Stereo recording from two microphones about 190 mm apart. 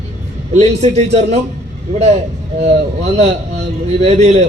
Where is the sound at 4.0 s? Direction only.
35° right (ahead or behind).